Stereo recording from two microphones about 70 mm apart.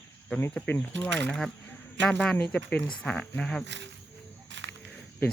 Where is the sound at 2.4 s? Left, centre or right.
Centre.